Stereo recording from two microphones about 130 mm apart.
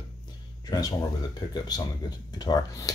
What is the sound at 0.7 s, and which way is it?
Speech, 30° left (ahead or behind).